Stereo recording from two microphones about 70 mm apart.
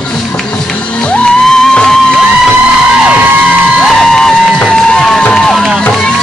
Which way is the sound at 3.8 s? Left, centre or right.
Centre.